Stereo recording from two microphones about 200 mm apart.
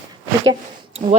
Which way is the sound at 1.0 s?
25° right (ahead or behind).